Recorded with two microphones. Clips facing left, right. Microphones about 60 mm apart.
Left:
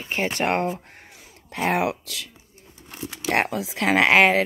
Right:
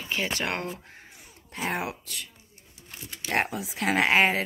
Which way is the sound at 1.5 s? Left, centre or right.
Left.